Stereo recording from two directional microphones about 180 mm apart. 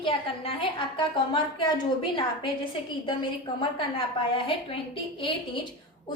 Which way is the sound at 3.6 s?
30° left (ahead or behind).